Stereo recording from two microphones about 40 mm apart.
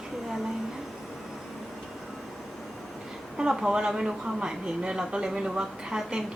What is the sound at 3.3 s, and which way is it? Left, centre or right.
A woman's voice, centre.